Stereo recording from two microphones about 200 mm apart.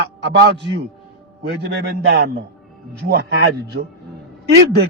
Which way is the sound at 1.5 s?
55° right (ahead or behind).